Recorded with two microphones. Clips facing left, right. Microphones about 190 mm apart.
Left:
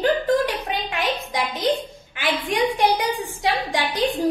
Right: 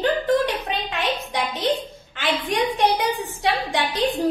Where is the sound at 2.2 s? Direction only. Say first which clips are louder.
Left 1 dB; 10° left (ahead or behind).